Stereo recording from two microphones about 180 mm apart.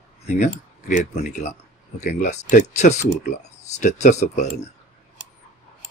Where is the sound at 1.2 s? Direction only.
45° left (ahead or behind).